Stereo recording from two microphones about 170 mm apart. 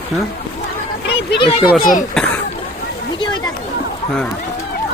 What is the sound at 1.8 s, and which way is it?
Speech, 55° left (ahead or behind).